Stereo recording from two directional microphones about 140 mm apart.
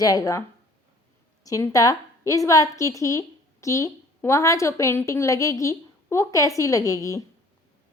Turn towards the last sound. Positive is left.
turn(degrees=20)  # may be behind; listen again after turning